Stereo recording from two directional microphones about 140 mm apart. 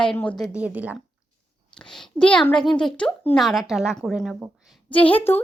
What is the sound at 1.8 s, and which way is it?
A woman's voice, 5° left (ahead or behind).